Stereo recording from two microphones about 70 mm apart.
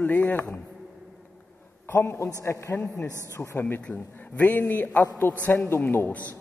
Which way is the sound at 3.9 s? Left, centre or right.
Left.